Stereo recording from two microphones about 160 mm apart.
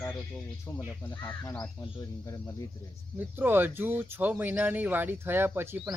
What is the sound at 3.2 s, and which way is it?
Speech, 10° right (ahead or behind).